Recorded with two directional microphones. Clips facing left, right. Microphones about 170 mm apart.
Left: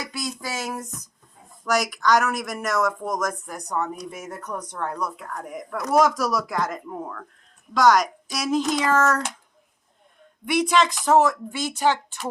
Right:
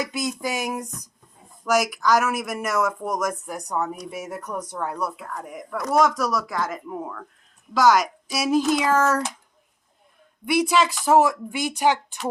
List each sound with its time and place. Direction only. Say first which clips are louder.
0.0 s speech: right 5 dB; 20° right (ahead or behind)
10.5 s speech: even; 5° right (ahead or behind)